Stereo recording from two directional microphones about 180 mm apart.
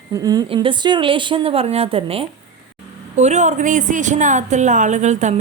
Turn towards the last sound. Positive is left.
turn(degrees=-40)  # may be behind; listen again after turning